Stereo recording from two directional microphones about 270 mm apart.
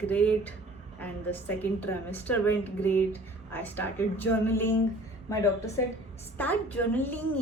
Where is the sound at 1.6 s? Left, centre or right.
Centre.